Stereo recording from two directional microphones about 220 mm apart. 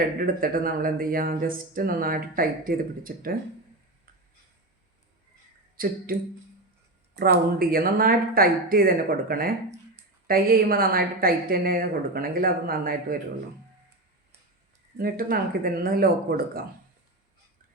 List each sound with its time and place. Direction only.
0.2 s a woman's voice: 40° right (ahead or behind)
5.7 s speech: 40° right (ahead or behind)
7.2 s a woman's voice: 40° right (ahead or behind)
14.9 s a woman's voice: 40° right (ahead or behind)